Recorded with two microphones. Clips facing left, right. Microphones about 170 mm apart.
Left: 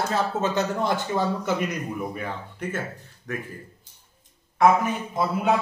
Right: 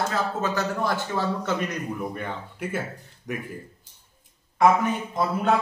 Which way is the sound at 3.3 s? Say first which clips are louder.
Even; 15° right (ahead or behind).